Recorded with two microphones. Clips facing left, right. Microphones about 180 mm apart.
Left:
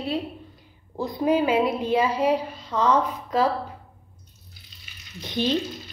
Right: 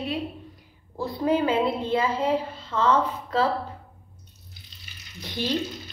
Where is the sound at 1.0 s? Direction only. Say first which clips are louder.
Left 2 dB; 15° left (ahead or behind).